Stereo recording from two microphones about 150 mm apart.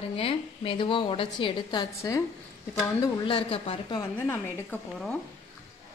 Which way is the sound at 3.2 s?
35° left (ahead or behind).